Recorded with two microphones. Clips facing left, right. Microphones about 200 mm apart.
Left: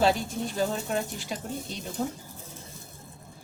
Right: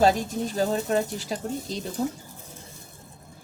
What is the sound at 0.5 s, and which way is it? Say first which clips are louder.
Speech: right 5 dB; 40° right (ahead or behind).